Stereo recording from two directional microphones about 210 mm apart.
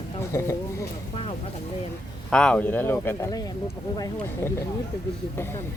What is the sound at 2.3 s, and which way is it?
Speech, 5° left (ahead or behind).